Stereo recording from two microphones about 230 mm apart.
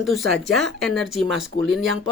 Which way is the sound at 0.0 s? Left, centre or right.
Centre.